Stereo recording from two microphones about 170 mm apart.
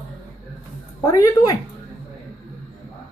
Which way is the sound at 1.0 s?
20° left (ahead or behind).